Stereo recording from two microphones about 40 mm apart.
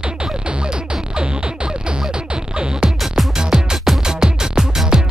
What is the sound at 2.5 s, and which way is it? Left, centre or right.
Music, right.